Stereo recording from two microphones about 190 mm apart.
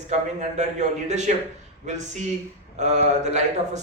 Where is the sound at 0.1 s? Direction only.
35° right (ahead or behind).